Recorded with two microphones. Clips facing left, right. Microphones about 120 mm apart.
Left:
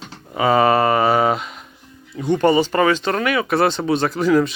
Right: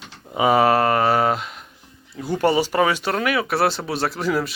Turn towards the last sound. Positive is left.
turn(degrees=-5)  # may be behind; listen again after turning